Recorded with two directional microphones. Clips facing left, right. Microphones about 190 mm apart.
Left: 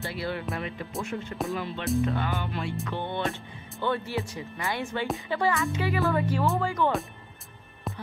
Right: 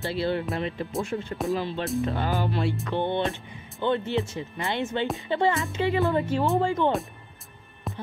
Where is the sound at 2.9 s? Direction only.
25° right (ahead or behind).